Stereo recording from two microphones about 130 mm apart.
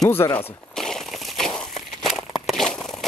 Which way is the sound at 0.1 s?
15° left (ahead or behind).